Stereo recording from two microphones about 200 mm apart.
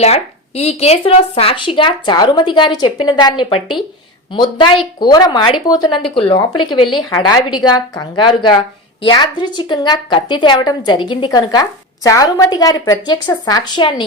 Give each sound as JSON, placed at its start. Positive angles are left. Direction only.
{"t": 0.0, "sound": "speech", "side_deg": 30}